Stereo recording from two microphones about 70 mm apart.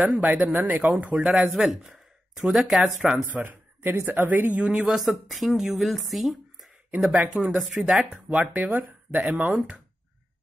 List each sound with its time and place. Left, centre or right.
0.0 s speech: right
1.1 s speech: centre
1.5 s speech: centre
3.3 s speech: right; by 6.7 s centre
7.1 s speech: centre